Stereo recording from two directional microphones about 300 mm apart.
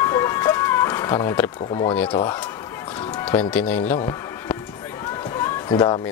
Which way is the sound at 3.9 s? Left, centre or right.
Centre.